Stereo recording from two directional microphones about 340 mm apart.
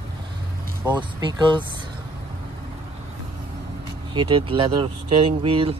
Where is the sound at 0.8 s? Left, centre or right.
Centre.